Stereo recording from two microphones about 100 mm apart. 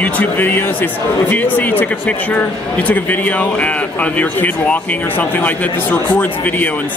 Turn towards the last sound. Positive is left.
turn(degrees=15)  # may be behind; listen again after turning